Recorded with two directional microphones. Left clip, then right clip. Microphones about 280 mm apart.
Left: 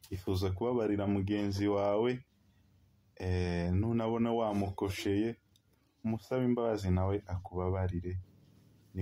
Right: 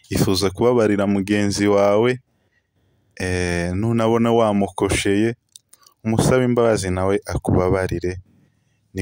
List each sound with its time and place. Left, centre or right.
0.1 s speech: right
3.2 s speech: right